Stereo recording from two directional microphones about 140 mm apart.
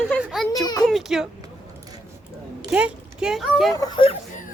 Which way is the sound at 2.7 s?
5° right (ahead or behind).